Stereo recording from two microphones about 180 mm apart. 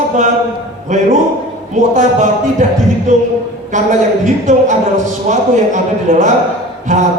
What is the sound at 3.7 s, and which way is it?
A man's voice, 45° right (ahead or behind).